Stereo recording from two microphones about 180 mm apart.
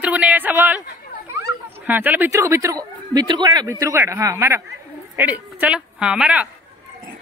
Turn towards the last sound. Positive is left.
turn(degrees=-5)  # may be behind; listen again after turning